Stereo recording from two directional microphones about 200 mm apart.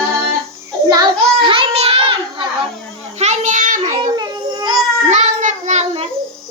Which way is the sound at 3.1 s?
35° right (ahead or behind).